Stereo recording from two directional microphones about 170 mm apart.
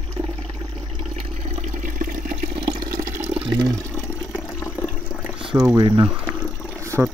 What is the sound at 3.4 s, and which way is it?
Water, 30° right (ahead or behind).